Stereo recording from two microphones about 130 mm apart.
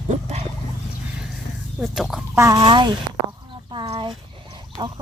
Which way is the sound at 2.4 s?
25° right (ahead or behind).